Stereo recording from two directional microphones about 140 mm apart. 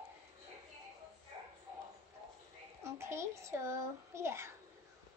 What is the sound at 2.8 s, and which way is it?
A child's voice, 20° right (ahead or behind).